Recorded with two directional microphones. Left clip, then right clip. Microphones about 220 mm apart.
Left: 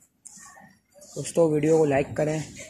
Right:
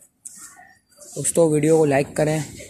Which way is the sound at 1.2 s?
15° right (ahead or behind).